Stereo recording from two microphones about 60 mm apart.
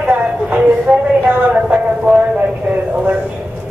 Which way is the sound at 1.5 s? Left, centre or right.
Centre.